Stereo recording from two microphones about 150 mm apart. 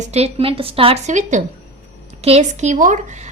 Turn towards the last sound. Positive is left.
turn(degrees=-55)  # may be behind; listen again after turning